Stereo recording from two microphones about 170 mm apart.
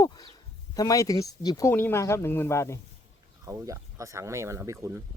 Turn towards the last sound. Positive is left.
turn(degrees=-20)  # may be behind; listen again after turning